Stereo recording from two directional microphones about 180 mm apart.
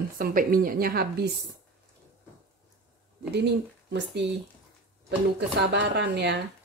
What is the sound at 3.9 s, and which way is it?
Speech, 75° right (ahead or behind).